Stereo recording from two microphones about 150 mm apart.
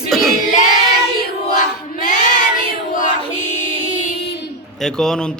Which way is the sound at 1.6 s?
60° left (ahead or behind).